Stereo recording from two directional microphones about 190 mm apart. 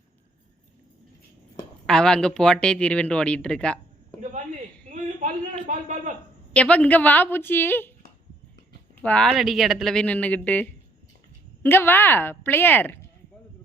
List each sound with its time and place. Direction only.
1.9 s speech: 5° left (ahead or behind)
4.2 s a sound: 40° right (ahead or behind)
5.6 s speech: 40° right (ahead or behind)
6.5 s a woman's voice: 5° left (ahead or behind)
9.0 s a woman's voice: 5° left (ahead or behind)